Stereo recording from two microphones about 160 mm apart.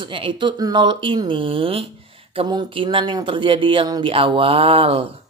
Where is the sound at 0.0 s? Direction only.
30° right (ahead or behind).